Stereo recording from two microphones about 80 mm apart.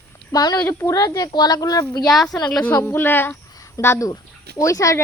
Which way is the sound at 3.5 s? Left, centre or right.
Left.